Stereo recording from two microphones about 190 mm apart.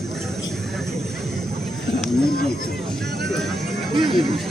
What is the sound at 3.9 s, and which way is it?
Music, 25° right (ahead or behind).